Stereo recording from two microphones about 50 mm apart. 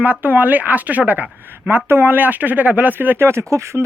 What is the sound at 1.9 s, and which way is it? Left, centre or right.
Speech, right.